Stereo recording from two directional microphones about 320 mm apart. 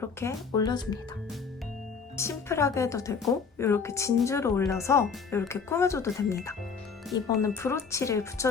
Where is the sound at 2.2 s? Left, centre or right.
Centre.